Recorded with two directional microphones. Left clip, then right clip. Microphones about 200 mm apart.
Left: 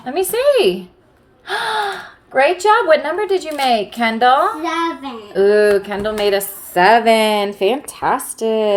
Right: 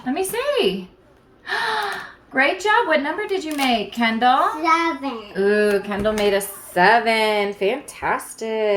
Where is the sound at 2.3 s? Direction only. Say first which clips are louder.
Left 5 dB; 45° left (ahead or behind).